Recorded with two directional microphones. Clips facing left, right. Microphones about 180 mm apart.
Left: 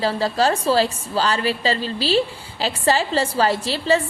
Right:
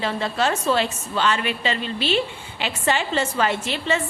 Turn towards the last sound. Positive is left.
turn(degrees=35)  # may be behind; listen again after turning